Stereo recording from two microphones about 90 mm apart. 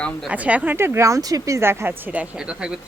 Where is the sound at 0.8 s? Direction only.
30° right (ahead or behind).